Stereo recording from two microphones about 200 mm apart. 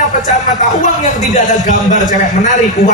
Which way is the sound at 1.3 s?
40° left (ahead or behind).